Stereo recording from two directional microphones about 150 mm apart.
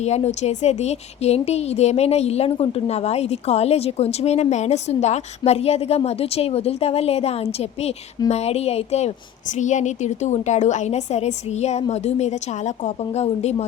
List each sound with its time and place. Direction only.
0.0 s a woman's voice: 45° left (ahead or behind)